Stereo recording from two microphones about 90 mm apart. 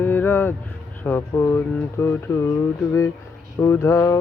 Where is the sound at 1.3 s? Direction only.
30° left (ahead or behind).